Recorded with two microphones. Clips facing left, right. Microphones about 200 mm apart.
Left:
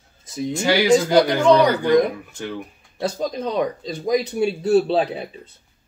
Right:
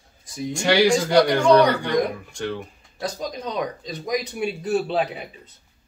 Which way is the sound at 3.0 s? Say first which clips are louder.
Left 5 dB; 30° left (ahead or behind).